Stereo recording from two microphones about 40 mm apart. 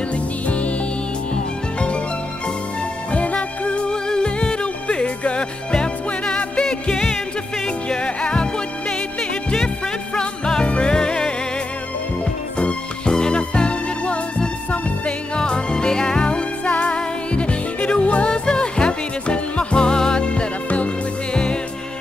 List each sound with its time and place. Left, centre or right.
0.1 s music: left
3.1 s music: left
12.5 s music: left
18.3 s music: left
21.3 s music: left